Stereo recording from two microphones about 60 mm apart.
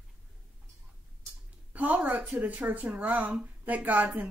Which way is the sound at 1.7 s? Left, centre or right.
Right.